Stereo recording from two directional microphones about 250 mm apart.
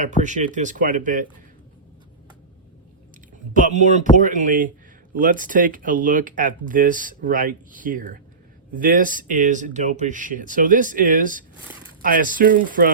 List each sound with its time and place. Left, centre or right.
0.2 s speech: right
3.5 s speech: right